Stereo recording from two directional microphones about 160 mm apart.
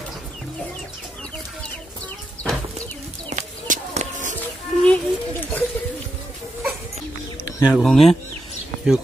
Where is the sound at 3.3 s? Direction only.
50° right (ahead or behind).